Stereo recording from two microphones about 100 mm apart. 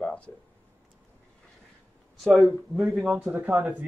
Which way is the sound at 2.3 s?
Centre (ahead or behind).